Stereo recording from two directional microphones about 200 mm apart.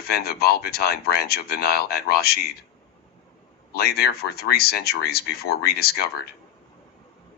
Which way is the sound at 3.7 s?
50° left (ahead or behind).